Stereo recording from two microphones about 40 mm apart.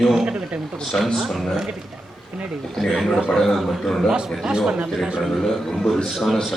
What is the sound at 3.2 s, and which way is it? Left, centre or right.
Speech, centre.